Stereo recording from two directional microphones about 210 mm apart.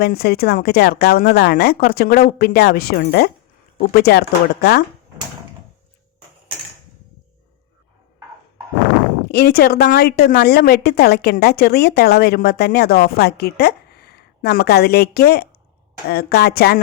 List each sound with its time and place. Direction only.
0.0 s a woman's voice: 50° left (ahead or behind)
9.3 s a woman's voice: 50° left (ahead or behind)